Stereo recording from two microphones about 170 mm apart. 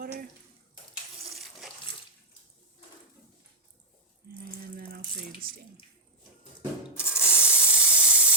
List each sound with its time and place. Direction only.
0.0 s stir: 60° right (ahead or behind)
1.3 s water tap: centre (ahead or behind)
4.4 s water: 60° right (ahead or behind)
6.6 s spray: 5° right (ahead or behind)